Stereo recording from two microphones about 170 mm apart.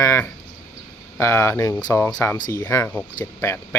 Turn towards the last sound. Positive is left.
turn(degrees=10)  # may be behind; listen again after turning